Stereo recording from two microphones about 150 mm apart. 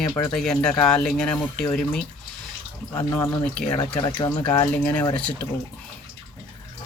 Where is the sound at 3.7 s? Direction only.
30° left (ahead or behind).